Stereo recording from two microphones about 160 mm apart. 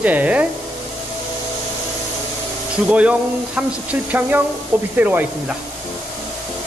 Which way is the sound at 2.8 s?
10° right (ahead or behind).